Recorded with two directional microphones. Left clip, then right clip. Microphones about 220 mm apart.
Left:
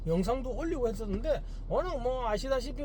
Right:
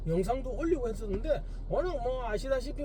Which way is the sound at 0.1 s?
15° left (ahead or behind).